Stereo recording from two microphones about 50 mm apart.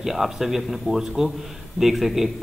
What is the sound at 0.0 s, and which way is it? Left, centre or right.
A man's voice, centre.